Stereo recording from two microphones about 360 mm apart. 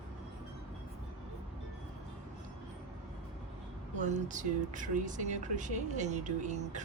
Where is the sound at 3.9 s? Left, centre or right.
Centre.